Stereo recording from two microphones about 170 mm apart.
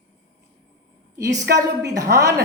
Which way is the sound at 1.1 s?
20° right (ahead or behind).